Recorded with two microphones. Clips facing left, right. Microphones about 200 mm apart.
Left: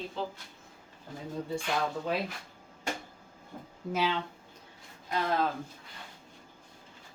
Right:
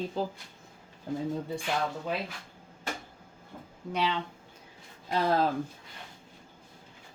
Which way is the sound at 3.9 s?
Centre (ahead or behind).